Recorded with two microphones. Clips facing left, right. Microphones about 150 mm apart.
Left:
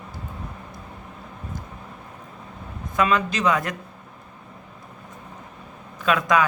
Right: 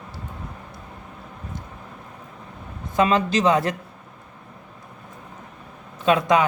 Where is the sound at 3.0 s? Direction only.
30° right (ahead or behind).